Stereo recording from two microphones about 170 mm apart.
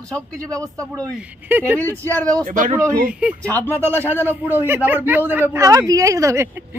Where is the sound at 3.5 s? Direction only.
10° left (ahead or behind).